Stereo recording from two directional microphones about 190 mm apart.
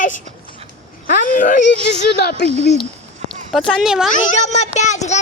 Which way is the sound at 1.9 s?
60° left (ahead or behind).